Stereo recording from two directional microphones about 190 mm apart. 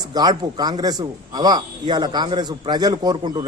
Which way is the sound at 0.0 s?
20° right (ahead or behind).